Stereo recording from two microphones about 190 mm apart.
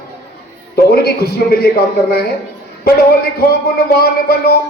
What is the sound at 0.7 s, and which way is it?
Speech, 55° left (ahead or behind).